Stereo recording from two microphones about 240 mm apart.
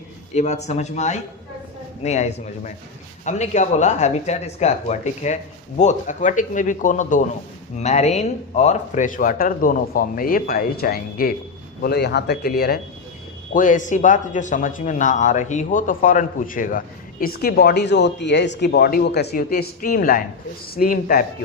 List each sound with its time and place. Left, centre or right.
0.3 s a man's voice: left